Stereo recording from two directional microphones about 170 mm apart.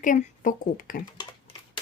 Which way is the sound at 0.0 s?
50° left (ahead or behind).